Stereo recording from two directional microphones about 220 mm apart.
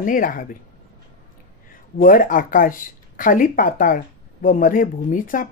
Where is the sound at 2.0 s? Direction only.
40° left (ahead or behind).